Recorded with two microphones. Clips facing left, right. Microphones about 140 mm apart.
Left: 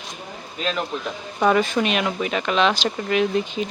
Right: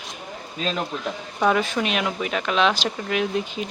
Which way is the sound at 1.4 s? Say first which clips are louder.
Left 2 dB; centre (ahead or behind).